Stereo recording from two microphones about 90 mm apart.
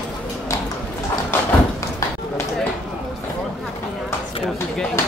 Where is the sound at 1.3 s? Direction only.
25° left (ahead or behind).